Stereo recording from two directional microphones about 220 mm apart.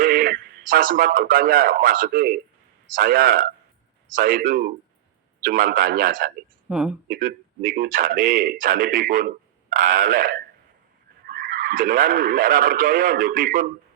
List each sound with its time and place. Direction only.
0.0 s a man's voice: 40° right (ahead or behind)
6.7 s speech: 5° right (ahead or behind)
7.1 s a man's voice: 40° right (ahead or behind)